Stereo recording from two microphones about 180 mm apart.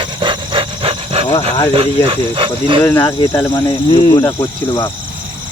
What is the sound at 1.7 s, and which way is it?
Speech, 30° right (ahead or behind).